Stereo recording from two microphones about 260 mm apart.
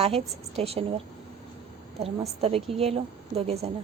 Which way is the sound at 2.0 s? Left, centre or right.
Right.